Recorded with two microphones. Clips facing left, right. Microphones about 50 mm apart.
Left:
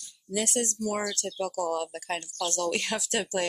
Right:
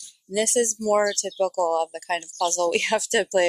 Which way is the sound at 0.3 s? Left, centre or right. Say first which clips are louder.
Right 7 dB; right.